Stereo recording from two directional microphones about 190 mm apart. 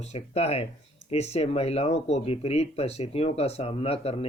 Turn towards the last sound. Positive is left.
turn(degrees=30)  # may be behind; listen again after turning